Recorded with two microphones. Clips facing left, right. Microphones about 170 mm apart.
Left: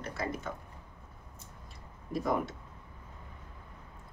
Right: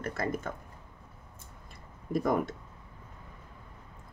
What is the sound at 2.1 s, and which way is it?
Speech, 50° right (ahead or behind).